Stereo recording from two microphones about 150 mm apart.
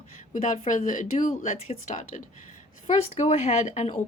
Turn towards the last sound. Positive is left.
turn(degrees=50)  # may be behind; listen again after turning